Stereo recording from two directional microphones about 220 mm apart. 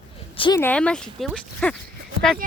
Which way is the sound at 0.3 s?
20° left (ahead or behind).